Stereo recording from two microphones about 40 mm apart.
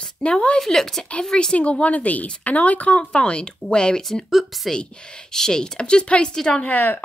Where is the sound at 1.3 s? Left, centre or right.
Left.